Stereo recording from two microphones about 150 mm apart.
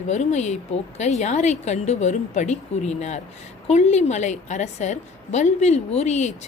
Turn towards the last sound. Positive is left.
turn(degrees=50)  # may be behind; listen again after turning